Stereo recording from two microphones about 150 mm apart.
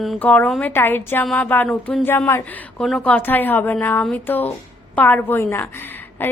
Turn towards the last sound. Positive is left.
turn(degrees=15)  # may be behind; listen again after turning